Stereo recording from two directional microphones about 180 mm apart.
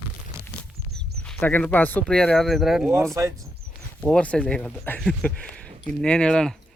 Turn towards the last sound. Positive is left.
turn(degrees=5)  # may be behind; listen again after turning